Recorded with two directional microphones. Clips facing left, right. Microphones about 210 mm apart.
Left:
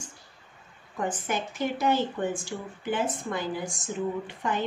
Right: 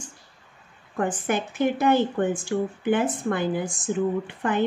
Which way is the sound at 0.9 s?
55° right (ahead or behind).